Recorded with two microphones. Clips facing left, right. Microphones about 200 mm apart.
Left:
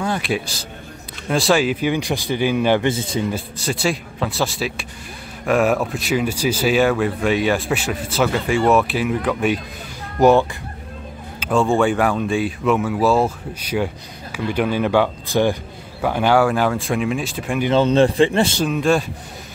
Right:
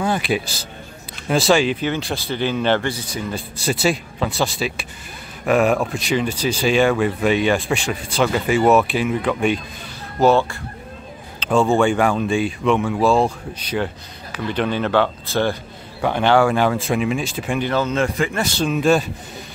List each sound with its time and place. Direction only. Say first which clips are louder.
0.0 s speech: right 1 dB; centre (ahead or behind)
2.9 s speech: left 6 dB; 25° left (ahead or behind)
3.6 s speech: right 2 dB; 5° right (ahead or behind)
10.2 s speech: left 2 dB; 15° left (ahead or behind)
11.3 s a sound: right 1 dB; 10° left (ahead or behind)
11.6 s speech: even; centre (ahead or behind)
17.7 s a man's voice: left 8 dB; 30° left (ahead or behind)
18.7 s speech: right 1 dB; centre (ahead or behind)